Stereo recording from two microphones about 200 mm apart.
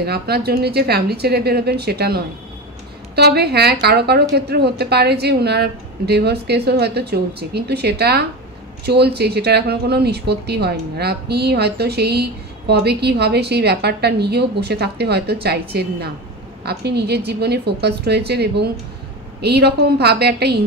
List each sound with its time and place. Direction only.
0.0 s a woman's voice: 55° right (ahead or behind)